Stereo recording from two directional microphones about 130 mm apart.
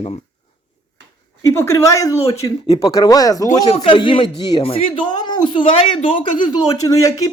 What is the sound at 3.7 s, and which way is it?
Speech, 40° left (ahead or behind).